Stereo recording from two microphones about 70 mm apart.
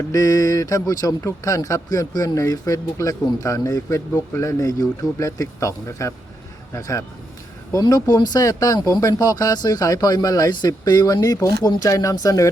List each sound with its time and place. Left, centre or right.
0.1 s speech: left
4.4 s speech: left
7.8 s speech: left